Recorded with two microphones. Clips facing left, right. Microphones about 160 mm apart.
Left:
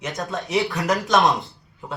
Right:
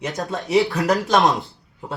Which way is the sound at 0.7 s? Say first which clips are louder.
Right 3 dB; 35° right (ahead or behind).